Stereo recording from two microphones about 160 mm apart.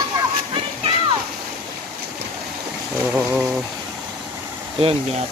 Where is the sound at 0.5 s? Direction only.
35° right (ahead or behind).